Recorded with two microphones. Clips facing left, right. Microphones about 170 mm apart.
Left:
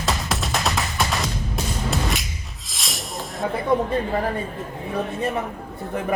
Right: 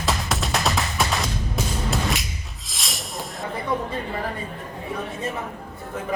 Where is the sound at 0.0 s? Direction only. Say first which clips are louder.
Even; centre (ahead or behind).